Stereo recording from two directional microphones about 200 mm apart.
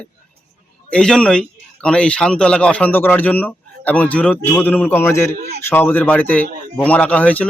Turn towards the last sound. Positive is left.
turn(degrees=5)  # may be behind; listen again after turning